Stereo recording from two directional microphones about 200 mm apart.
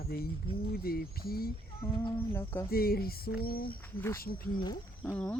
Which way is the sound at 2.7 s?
50° left (ahead or behind).